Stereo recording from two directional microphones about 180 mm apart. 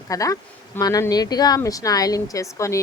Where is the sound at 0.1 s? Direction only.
20° left (ahead or behind).